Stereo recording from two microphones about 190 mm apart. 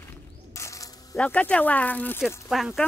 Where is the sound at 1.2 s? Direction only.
5° left (ahead or behind).